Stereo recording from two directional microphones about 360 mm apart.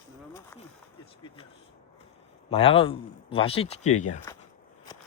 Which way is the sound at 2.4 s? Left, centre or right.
Centre.